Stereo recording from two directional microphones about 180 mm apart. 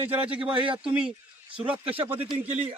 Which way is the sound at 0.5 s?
30° right (ahead or behind).